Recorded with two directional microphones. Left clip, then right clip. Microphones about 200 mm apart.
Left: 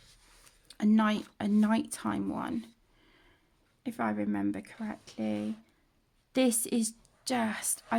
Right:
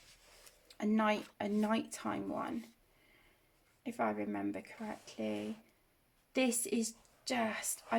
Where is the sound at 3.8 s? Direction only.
50° left (ahead or behind).